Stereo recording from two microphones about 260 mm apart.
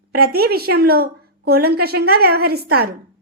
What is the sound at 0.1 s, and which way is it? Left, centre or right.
A woman's voice, right.